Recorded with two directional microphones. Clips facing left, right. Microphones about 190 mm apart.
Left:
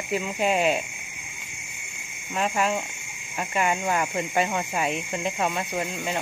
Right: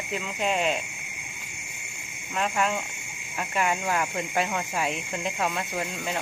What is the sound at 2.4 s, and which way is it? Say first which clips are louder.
Speech: left 2 dB; 5° left (ahead or behind).